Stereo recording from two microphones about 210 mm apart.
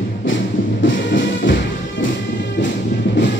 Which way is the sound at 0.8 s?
60° left (ahead or behind).